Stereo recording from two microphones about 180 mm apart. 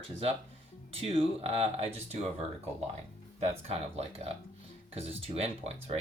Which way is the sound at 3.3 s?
35° right (ahead or behind).